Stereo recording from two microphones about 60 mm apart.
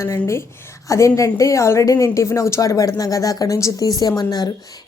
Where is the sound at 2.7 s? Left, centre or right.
Left.